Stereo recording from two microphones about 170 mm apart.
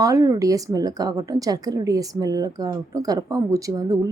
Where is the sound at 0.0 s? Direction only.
20° right (ahead or behind).